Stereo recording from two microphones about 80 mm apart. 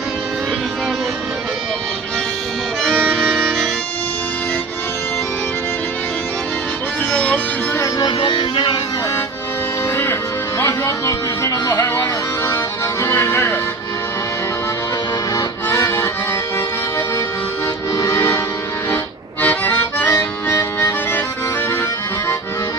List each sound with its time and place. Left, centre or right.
2.8 s music: centre
8.2 s music: left
9.9 s music: left
11.7 s music: left
15.4 s accordion: left
17.9 s music: left
19.4 s accordion: left
20.1 s accordion: left